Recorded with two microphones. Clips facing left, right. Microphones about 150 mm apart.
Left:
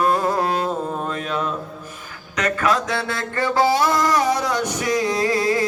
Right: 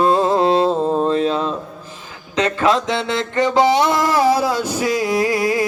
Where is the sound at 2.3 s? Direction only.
25° right (ahead or behind).